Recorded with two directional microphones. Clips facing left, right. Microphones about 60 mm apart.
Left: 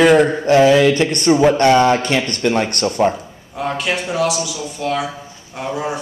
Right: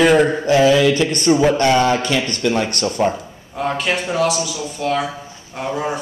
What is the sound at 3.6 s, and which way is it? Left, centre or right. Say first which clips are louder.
Speech: right 1 dB; centre.